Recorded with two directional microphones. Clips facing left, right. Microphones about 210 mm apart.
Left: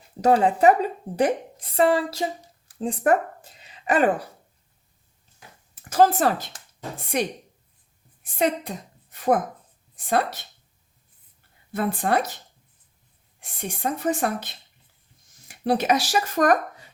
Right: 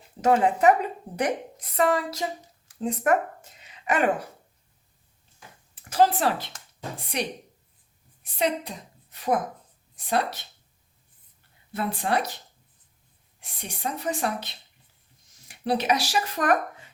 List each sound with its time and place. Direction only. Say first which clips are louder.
0.2 s a woman's voice: left 2 dB; 35° left (ahead or behind)
5.9 s speech: left 3 dB; 45° left (ahead or behind)
11.7 s speech: left 3 dB; 50° left (ahead or behind)
13.4 s speech: left 4 dB; 50° left (ahead or behind)